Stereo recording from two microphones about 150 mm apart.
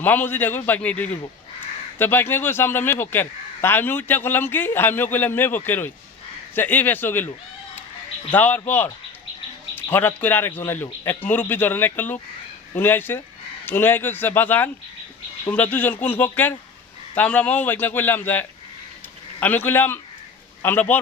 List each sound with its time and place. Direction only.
0.0 s a man's voice: 10° left (ahead or behind)
8.3 s a man's voice: 10° left (ahead or behind)